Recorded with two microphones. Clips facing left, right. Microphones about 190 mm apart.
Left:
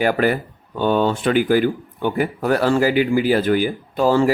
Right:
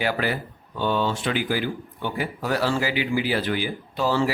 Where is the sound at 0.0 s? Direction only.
50° left (ahead or behind).